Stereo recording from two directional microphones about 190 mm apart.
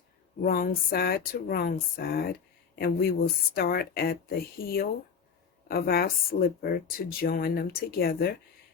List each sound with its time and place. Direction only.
0.4 s speech: 50° left (ahead or behind)